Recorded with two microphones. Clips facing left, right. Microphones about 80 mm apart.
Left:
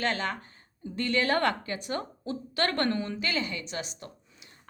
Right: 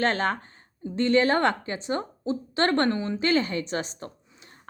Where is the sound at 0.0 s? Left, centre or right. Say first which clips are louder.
Right 6 dB; right.